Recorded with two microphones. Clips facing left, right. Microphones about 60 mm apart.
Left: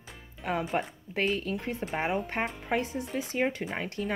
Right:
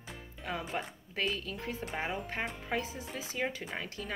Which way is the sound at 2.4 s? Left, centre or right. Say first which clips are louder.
Left 5 dB; left.